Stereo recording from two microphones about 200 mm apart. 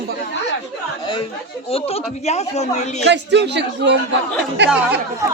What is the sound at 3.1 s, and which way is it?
Speech, 60° right (ahead or behind).